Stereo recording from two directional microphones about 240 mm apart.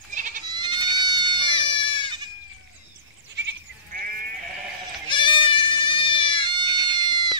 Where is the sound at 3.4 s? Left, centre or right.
Right.